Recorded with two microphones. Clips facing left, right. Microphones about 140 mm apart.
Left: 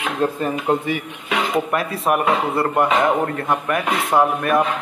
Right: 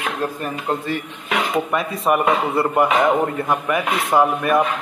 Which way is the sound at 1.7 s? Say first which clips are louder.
Right 1 dB; centre (ahead or behind).